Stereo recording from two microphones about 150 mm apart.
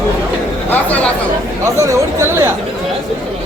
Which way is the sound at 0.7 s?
10° left (ahead or behind).